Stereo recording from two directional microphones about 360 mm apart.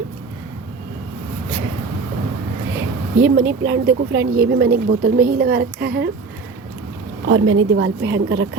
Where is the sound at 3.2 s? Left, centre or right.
Right.